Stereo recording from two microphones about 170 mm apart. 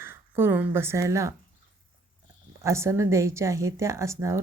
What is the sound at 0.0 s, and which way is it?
Speech, 15° right (ahead or behind).